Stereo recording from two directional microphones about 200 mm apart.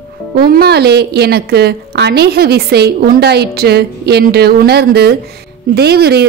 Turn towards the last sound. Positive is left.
turn(degrees=-55)  # may be behind; listen again after turning